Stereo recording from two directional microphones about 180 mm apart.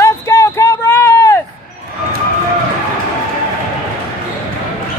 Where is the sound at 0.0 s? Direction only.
15° left (ahead or behind).